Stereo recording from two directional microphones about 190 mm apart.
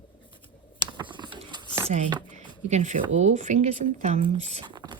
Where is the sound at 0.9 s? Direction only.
25° right (ahead or behind).